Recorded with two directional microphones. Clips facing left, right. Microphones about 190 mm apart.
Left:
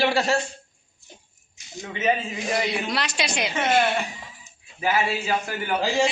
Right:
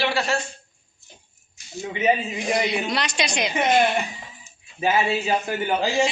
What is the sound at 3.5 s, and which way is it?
A man's voice, 15° right (ahead or behind).